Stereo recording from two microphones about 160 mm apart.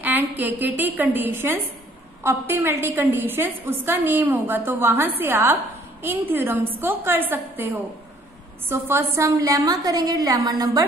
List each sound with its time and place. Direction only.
0.0 s a woman's voice: 10° right (ahead or behind)